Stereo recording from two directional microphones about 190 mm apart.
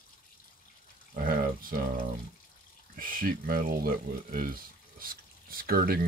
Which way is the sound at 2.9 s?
45° right (ahead or behind).